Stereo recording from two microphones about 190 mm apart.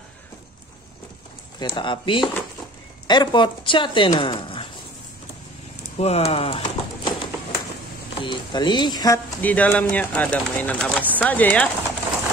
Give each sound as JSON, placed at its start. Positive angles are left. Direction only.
{"t": 1.6, "sound": "speech", "side_deg": 25}
{"t": 5.9, "sound": "a sound", "side_deg": 35}
{"t": 8.2, "sound": "speech", "side_deg": 25}